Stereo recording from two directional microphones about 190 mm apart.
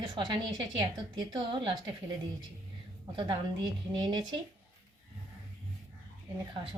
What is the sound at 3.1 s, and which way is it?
A woman's voice, 25° right (ahead or behind).